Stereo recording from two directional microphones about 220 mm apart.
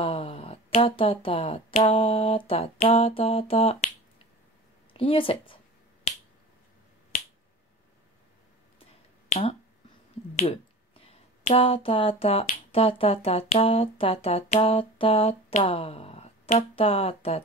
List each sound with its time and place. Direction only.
0.0 s speech: 25° left (ahead or behind)
9.3 s speech: 25° left (ahead or behind)